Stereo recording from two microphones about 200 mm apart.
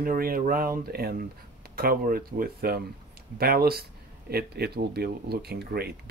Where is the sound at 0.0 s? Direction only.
45° right (ahead or behind).